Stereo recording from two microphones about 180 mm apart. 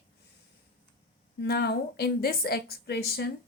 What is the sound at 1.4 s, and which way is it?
A woman's voice, 60° left (ahead or behind).